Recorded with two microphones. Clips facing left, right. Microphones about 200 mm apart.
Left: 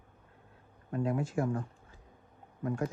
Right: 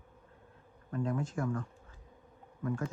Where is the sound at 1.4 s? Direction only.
25° left (ahead or behind).